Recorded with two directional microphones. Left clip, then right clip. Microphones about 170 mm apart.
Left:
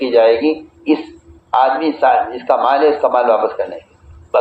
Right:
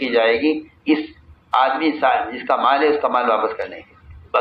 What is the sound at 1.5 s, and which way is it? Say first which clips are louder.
A man's voice: left 4 dB; 55° left (ahead or behind).